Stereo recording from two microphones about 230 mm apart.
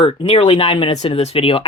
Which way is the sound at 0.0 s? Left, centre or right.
Left.